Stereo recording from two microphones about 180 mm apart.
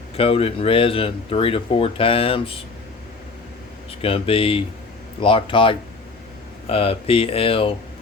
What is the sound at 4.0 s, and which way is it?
Speech, 30° left (ahead or behind).